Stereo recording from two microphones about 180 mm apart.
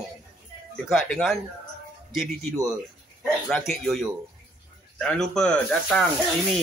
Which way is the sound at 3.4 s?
Centre (ahead or behind).